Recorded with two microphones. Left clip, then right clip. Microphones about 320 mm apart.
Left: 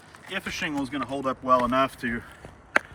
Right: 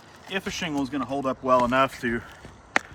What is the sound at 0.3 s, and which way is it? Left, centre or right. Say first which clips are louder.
Speech: right 1 dB; centre.